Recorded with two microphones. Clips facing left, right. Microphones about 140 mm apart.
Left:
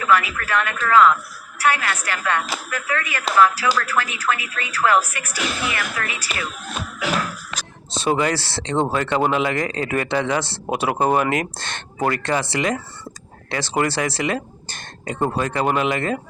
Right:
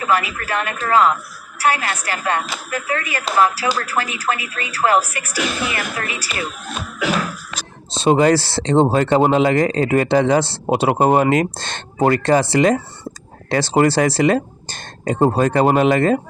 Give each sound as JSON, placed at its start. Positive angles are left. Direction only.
{"t": 0.0, "sound": "speech", "side_deg": -35}
{"t": 7.9, "sound": "speech", "side_deg": -25}
{"t": 10.7, "sound": "speech", "side_deg": -30}